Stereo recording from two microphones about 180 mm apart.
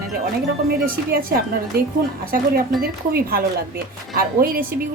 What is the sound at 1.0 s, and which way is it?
Speech, 55° right (ahead or behind).